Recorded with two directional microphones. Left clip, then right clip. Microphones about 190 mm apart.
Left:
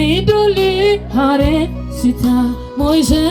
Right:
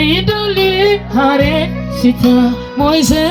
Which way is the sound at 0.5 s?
20° right (ahead or behind).